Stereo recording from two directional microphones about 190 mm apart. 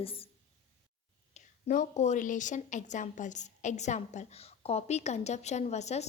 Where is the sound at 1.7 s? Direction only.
40° left (ahead or behind).